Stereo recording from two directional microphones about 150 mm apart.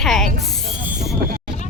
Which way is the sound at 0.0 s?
Centre (ahead or behind).